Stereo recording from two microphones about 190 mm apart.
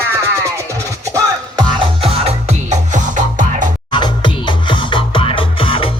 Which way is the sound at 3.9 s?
25° left (ahead or behind).